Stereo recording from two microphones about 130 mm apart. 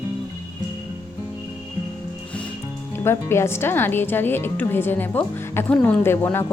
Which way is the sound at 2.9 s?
20° left (ahead or behind).